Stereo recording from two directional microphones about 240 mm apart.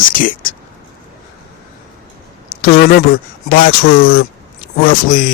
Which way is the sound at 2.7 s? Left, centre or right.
Left.